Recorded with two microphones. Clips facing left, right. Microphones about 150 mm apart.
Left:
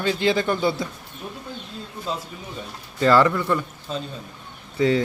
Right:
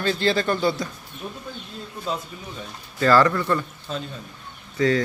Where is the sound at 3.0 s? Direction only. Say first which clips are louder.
Even; 20° left (ahead or behind).